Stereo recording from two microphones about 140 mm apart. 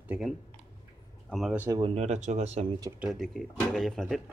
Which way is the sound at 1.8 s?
55° right (ahead or behind).